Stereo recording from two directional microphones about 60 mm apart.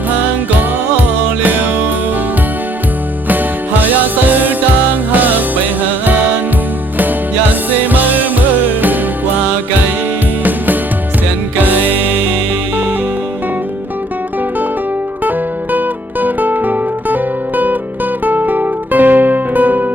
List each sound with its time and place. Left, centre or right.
0.5 s music: right
3.2 s music: right
7.9 s music: right
11.6 s music: right
16.2 s music: right
18.3 s music: right